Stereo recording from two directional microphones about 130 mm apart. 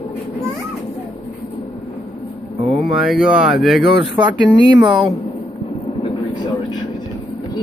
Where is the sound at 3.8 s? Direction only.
40° right (ahead or behind).